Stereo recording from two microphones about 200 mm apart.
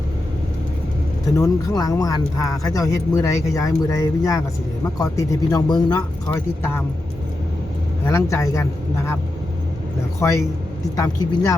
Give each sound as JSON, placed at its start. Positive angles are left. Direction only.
{"t": 1.4, "sound": "speech", "side_deg": 20}
{"t": 6.3, "sound": "speech", "side_deg": 10}
{"t": 8.0, "sound": "speech", "side_deg": 15}
{"t": 10.2, "sound": "speech", "side_deg": 15}